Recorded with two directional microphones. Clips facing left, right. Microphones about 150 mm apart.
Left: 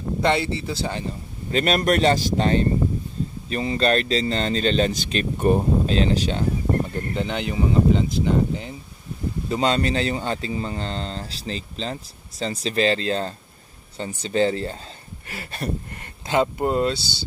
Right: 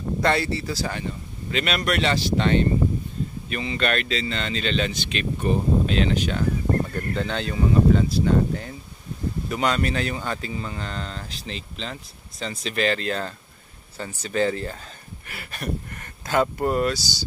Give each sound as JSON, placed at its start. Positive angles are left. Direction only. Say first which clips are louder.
{"t": 0.2, "sound": "speech", "louder": "left 1 dB", "side_deg": 20}
{"t": 1.5, "sound": "speech", "louder": "left 5 dB", "side_deg": 40}
{"t": 5.9, "sound": "speech", "louder": "left 2 dB", "side_deg": 35}
{"t": 6.9, "sound": "speech", "louder": "left 1 dB", "side_deg": 20}